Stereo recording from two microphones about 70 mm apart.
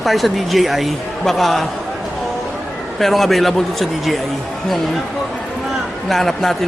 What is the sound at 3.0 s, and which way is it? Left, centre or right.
Speech, centre.